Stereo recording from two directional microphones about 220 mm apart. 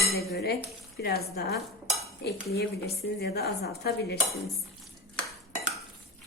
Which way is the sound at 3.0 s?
45° left (ahead or behind).